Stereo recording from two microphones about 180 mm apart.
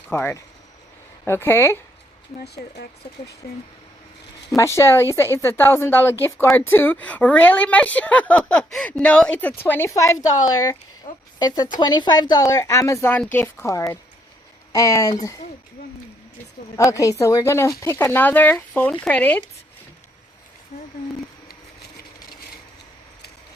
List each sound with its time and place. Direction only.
0.1 s speech: 10° left (ahead or behind)
2.4 s speech: 65° left (ahead or behind)
4.4 s speech: 15° left (ahead or behind)
16.7 s speech: 15° left (ahead or behind)
20.7 s a sound: 40° left (ahead or behind)